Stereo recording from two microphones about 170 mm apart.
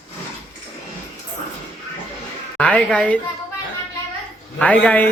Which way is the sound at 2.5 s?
5° left (ahead or behind).